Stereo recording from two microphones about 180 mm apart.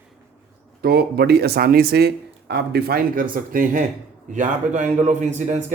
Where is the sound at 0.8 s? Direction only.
60° right (ahead or behind).